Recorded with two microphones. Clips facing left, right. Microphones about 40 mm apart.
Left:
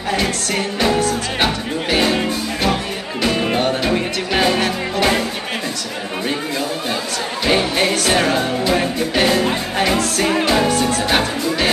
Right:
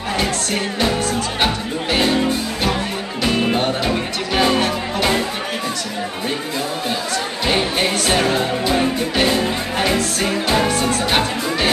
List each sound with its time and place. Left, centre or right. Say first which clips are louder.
2.0 s music: even; centre
3.4 s music: left 1 dB; centre
8.7 s music: even; centre
10.2 s music: left 3 dB; left
10.7 s music: left 1 dB; right
11.1 s music: left 1 dB; centre